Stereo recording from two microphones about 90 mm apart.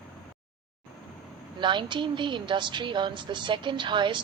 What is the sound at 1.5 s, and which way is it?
A woman's voice, 60° right (ahead or behind).